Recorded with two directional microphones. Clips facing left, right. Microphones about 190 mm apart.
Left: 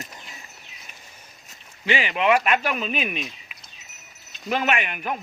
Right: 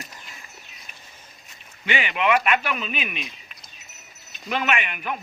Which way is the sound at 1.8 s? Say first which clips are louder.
Left 2 dB; 30° left (ahead or behind).